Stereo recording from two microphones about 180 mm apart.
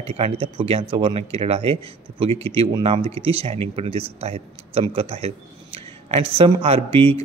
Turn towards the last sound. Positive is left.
turn(degrees=-35)  # may be behind; listen again after turning